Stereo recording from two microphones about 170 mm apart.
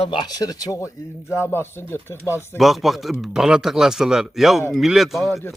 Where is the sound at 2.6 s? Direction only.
Centre (ahead or behind).